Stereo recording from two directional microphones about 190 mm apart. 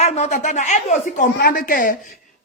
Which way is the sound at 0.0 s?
35° left (ahead or behind).